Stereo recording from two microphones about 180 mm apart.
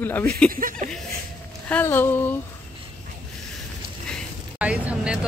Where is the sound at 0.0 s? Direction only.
10° left (ahead or behind).